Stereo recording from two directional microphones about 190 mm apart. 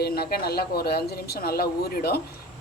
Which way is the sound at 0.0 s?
55° left (ahead or behind).